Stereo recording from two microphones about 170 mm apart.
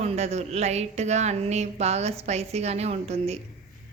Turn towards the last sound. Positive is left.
turn(degrees=-40)  # may be behind; listen again after turning